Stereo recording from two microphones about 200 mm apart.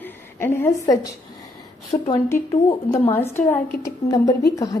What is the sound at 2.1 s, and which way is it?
A woman's voice, 15° left (ahead or behind).